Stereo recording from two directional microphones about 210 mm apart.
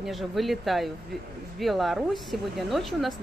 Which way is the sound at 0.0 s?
Centre (ahead or behind).